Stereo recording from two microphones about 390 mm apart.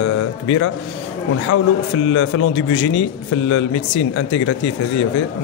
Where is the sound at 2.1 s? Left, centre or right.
Left.